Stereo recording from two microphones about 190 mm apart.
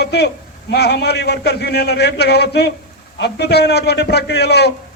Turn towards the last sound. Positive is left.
turn(degrees=60)  # may be behind; listen again after turning